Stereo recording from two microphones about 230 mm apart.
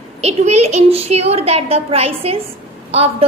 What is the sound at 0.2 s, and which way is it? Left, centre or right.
A woman's voice, right.